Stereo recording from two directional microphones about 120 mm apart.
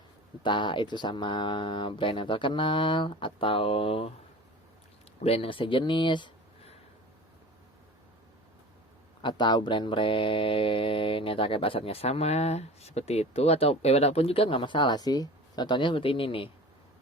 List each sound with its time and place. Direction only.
0.4 s speech: 40° left (ahead or behind)
5.2 s speech: 55° left (ahead or behind)
9.2 s speech: 40° left (ahead or behind)